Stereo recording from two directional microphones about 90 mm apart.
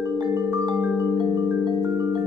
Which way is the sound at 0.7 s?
20° right (ahead or behind).